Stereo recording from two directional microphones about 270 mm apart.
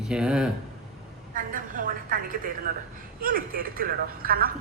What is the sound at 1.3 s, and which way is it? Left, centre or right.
A woman's voice, right.